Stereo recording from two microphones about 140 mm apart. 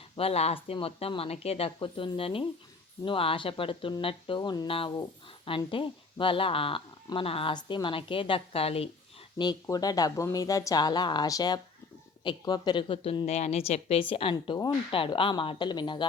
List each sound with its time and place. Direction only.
0.2 s a woman's voice: 45° left (ahead or behind)
9.4 s a woman's voice: 30° left (ahead or behind)